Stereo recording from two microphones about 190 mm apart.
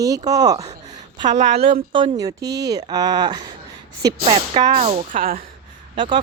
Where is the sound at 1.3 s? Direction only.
35° right (ahead or behind).